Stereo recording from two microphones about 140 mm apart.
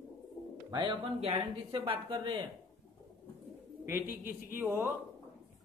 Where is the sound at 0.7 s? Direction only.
35° right (ahead or behind).